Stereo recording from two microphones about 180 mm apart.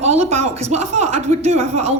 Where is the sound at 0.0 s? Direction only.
35° right (ahead or behind).